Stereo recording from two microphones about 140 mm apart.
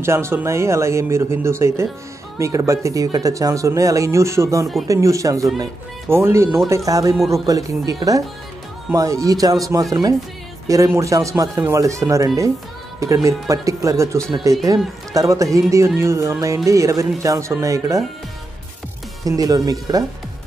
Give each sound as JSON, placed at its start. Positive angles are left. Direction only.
{"t": 0.0, "sound": "speech", "side_deg": -20}
{"t": 19.2, "sound": "speech", "side_deg": -25}